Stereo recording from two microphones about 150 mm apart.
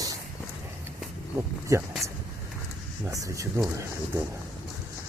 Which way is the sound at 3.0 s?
20° right (ahead or behind).